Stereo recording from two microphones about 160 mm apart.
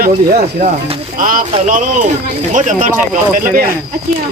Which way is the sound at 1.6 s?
55° right (ahead or behind).